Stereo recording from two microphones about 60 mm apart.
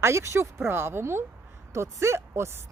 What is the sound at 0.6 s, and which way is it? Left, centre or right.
Speech, right.